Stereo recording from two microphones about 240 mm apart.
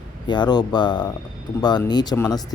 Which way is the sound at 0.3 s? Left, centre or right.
Centre.